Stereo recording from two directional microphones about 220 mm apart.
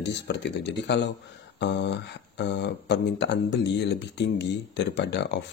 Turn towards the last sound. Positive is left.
turn(degrees=50)  # may be behind; listen again after turning